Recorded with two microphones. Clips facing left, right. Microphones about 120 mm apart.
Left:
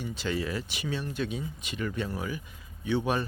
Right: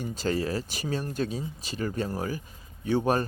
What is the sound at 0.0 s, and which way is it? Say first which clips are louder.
Speech: right 3 dB; 40° right (ahead or behind).